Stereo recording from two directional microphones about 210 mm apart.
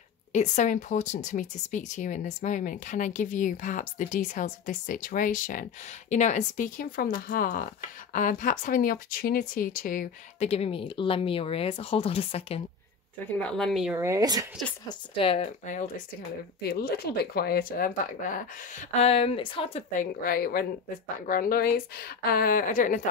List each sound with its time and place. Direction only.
0.3 s speech: 35° left (ahead or behind)
13.4 s speech: 5° left (ahead or behind)
14.0 s speech: 15° right (ahead or behind)
14.9 s speech: 25° left (ahead or behind)
16.6 s speech: 50° left (ahead or behind); by 19.8 s 25° left (ahead or behind)
20.0 s speech: 45° left (ahead or behind)